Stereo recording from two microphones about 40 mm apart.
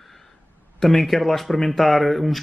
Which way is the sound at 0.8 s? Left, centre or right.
Centre.